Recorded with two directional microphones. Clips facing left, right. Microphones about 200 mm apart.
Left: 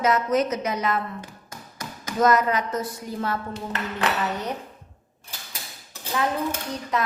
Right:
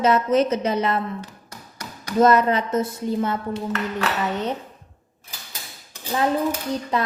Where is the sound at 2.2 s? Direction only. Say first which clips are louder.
Right 3 dB; 30° right (ahead or behind).